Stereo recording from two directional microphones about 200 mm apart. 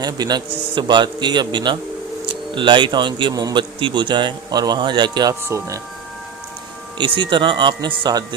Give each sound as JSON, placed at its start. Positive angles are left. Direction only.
{"t": 0.0, "sound": "speech", "side_deg": -20}
{"t": 7.0, "sound": "speech", "side_deg": -25}